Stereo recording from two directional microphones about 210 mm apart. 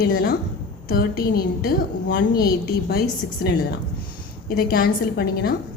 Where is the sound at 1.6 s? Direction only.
50° left (ahead or behind).